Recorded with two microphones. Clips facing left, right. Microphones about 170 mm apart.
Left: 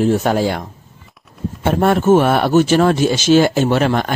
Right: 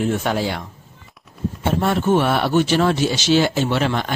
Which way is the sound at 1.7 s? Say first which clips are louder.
Left 6 dB; 55° left (ahead or behind).